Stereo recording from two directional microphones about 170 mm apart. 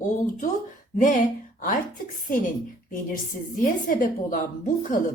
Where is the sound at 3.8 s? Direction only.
55° left (ahead or behind).